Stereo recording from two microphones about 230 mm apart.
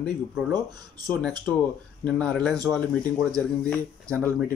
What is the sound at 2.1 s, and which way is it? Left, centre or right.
Speech, centre.